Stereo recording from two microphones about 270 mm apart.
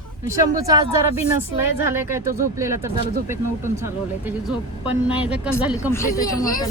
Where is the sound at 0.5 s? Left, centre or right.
Centre.